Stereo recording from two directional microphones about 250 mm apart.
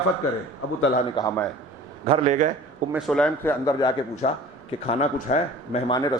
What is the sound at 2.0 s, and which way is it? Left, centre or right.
Speech, right.